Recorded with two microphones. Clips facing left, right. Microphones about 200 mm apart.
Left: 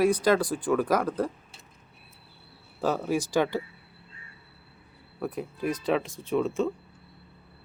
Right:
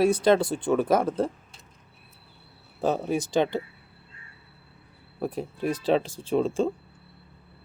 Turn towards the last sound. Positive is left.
turn(degrees=-30)  # may be behind; listen again after turning